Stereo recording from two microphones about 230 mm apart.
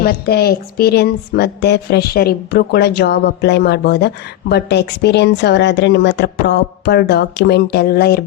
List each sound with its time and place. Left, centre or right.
0.0 s speech: left